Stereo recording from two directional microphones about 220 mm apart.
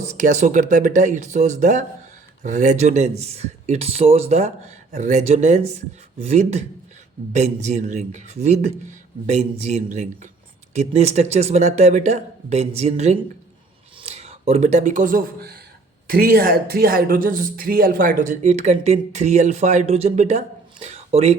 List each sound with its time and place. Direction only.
0.0 s speech: 30° right (ahead or behind)